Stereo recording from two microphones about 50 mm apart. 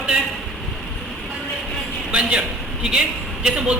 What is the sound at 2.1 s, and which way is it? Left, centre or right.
A man's voice, right.